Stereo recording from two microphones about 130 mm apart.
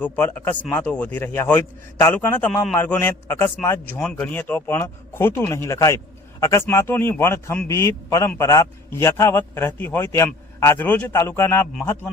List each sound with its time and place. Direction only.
0.0 s a man's voice: 15° left (ahead or behind)